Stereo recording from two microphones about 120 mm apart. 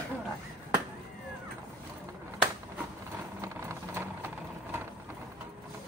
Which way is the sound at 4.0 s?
20° right (ahead or behind).